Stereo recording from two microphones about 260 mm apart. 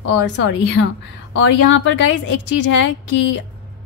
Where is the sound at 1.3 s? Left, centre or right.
Left.